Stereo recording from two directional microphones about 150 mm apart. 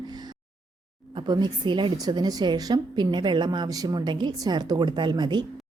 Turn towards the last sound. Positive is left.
turn(degrees=-30)  # may be behind; listen again after turning